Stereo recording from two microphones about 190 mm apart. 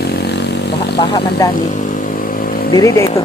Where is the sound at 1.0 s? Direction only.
25° left (ahead or behind).